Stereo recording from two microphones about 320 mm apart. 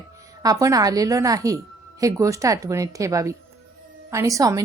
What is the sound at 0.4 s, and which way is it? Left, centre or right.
A woman's voice, centre.